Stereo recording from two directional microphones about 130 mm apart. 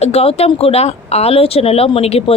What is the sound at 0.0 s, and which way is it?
Speech, 50° left (ahead or behind).